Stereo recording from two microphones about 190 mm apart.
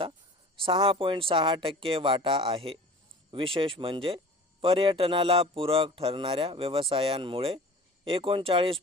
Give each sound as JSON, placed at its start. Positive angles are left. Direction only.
{"t": 0.6, "sound": "speech", "side_deg": -30}